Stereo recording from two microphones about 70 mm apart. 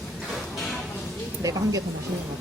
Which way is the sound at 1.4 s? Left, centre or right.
Right.